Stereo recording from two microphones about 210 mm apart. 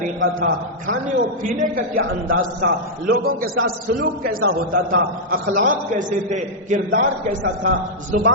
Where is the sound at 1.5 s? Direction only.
40° right (ahead or behind).